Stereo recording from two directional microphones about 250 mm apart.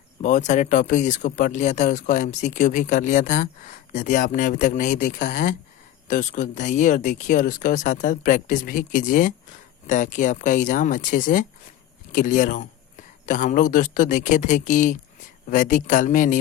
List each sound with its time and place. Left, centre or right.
0.2 s speech: left